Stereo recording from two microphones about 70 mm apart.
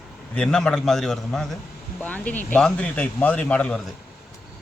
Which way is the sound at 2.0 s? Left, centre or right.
Left.